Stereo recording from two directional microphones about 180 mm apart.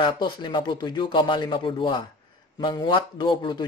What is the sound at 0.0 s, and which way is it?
Speech, 25° left (ahead or behind).